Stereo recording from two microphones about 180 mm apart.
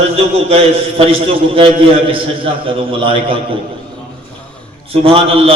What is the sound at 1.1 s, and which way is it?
A man's voice, 30° right (ahead or behind).